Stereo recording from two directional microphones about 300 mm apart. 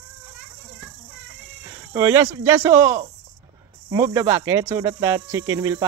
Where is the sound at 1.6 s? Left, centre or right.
Centre.